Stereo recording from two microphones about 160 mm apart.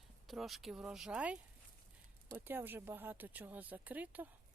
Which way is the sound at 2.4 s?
15° right (ahead or behind).